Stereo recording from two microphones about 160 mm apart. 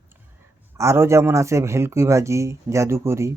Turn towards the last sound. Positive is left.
turn(degrees=-15)  # may be behind; listen again after turning